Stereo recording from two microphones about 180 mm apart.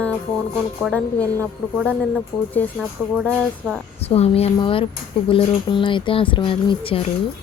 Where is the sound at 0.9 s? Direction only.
10° left (ahead or behind).